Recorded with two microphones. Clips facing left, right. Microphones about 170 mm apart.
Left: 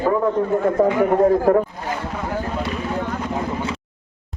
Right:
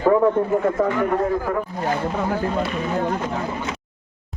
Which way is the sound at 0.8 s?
30° left (ahead or behind).